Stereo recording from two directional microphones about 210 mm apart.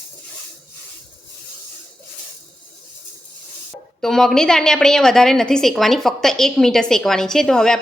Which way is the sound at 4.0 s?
Centre (ahead or behind).